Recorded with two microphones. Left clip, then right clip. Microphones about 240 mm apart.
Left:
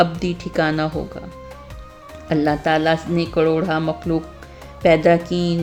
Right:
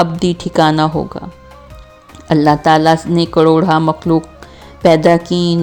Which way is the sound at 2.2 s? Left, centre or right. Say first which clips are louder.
Right 8 dB; right.